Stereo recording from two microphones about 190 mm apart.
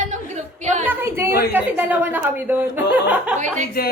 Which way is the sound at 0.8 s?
10° right (ahead or behind).